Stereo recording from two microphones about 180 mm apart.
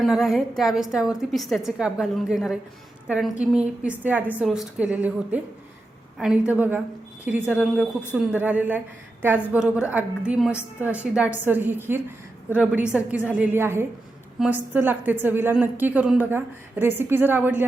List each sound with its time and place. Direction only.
0.0 s a woman's voice: centre (ahead or behind)